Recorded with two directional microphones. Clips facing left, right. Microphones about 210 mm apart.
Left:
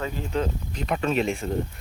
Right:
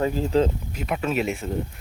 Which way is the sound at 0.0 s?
35° right (ahead or behind).